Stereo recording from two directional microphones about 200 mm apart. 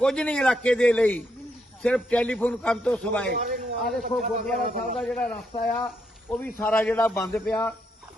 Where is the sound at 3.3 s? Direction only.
45° right (ahead or behind).